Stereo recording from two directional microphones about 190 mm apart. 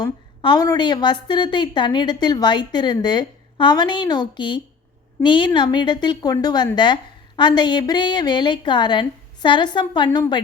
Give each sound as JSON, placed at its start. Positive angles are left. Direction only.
{"t": 0.0, "sound": "a woman's voice", "side_deg": 20}